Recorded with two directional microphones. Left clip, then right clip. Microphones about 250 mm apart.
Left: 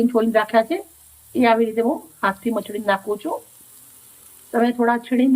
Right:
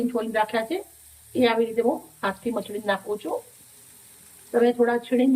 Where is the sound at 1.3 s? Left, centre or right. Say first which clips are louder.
Left 5 dB; centre.